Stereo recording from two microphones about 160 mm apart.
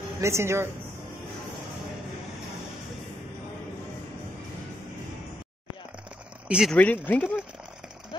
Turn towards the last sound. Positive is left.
turn(degrees=10)  # may be behind; listen again after turning